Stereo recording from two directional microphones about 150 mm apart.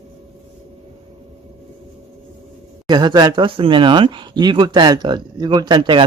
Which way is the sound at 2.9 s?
30° right (ahead or behind).